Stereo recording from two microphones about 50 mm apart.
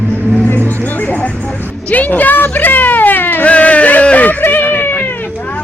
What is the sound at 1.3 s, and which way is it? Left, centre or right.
Music, left.